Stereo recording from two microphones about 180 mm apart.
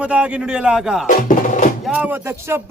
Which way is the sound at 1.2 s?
45° left (ahead or behind).